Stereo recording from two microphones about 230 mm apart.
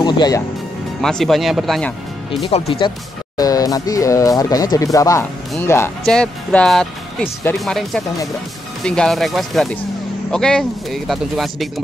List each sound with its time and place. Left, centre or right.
0.0 s speech: centre
1.0 s speech: centre
2.4 s speech: left; by 11.8 s centre